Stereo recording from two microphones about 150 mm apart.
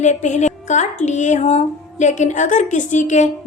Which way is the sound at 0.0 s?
50° left (ahead or behind).